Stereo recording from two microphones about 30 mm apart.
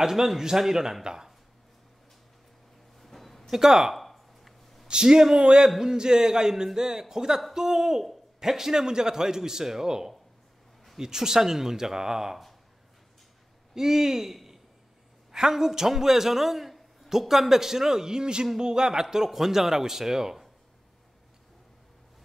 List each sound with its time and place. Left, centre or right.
0.0 s a man's voice: centre
3.0 s music: centre
3.5 s speech: centre
3.9 s a sound: centre
4.8 s a man's voice: right
13.7 s a man's voice: centre